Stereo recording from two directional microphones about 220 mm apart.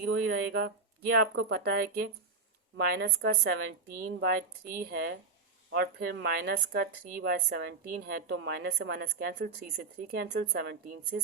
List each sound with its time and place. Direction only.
0.0 s speech: 55° right (ahead or behind)